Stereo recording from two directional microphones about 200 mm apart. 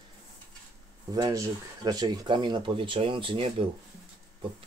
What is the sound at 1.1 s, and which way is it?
Speech, 15° right (ahead or behind).